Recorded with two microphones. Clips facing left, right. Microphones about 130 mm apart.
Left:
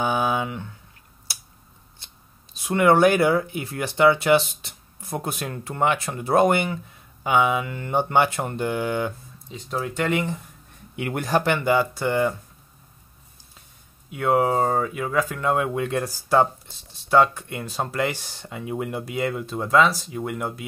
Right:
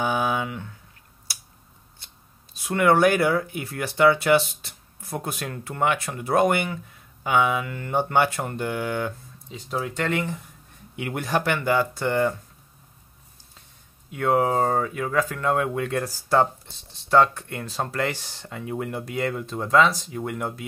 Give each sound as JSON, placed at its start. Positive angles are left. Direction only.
{"t": 0.0, "sound": "a sound", "side_deg": 25}
{"t": 2.5, "sound": "speech", "side_deg": 20}
{"t": 9.5, "sound": "speech", "side_deg": 0}
{"t": 11.0, "sound": "speech", "side_deg": 55}
{"t": 11.2, "sound": "speech", "side_deg": 35}
{"t": 11.5, "sound": "speech", "side_deg": 15}
{"t": 14.1, "sound": "speech", "side_deg": 5}